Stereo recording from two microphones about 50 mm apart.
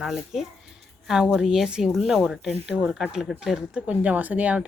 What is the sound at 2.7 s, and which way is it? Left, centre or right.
Speech, centre.